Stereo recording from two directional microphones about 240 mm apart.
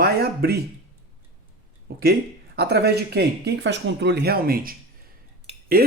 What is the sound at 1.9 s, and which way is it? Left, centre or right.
Speech, right.